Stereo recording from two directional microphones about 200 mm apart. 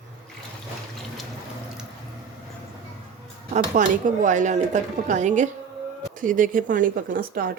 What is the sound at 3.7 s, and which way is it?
A woman's voice, 40° right (ahead or behind).